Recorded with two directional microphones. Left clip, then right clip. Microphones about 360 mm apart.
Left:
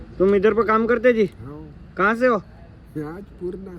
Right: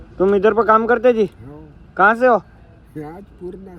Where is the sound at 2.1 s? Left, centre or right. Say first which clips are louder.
Right 5 dB; centre.